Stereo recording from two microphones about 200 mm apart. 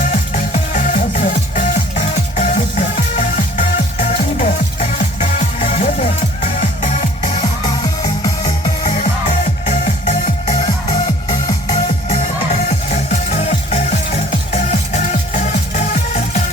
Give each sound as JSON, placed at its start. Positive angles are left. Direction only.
{"t": 0.1, "sound": "music", "side_deg": 35}